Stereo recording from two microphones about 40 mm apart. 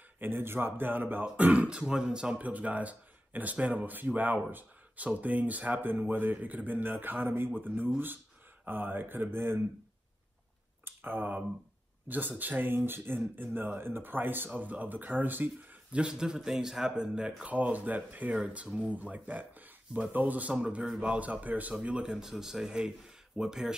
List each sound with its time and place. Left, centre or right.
0.2 s a man's voice: right
1.2 s speech: right
1.7 s speech: right
2.4 s speech: right
4.5 s a sound: right
5.0 s a man's voice: right
10.9 s speech: right
12.1 s a man's voice: right
14.5 s speech: right
15.9 s speech: right
17.5 s speech: right
20.5 s speech: right
21.8 s speech: right
22.3 s speech: centre